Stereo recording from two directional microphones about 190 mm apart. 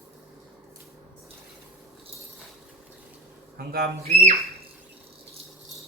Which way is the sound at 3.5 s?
55° right (ahead or behind).